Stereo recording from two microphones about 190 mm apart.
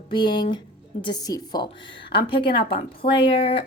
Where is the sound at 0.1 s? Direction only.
25° left (ahead or behind).